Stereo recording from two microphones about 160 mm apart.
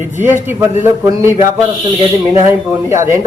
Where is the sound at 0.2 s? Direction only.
15° right (ahead or behind).